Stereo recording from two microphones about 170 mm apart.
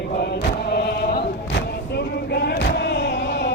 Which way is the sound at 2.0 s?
75° left (ahead or behind).